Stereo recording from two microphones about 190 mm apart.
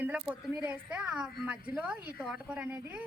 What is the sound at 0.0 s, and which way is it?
A woman's voice, 5° right (ahead or behind).